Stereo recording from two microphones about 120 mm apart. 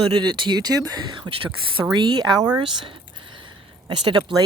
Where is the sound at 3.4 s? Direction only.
40° right (ahead or behind).